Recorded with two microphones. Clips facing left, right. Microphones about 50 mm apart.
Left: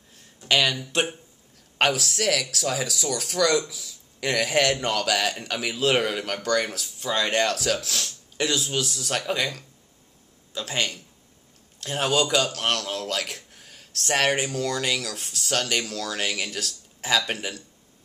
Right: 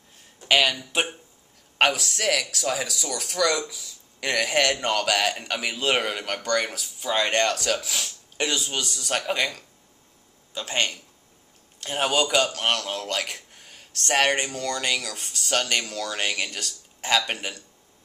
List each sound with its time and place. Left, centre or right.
0.1 s a man's voice: centre